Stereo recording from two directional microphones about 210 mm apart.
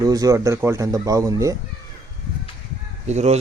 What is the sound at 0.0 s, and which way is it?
Speech, 15° right (ahead or behind).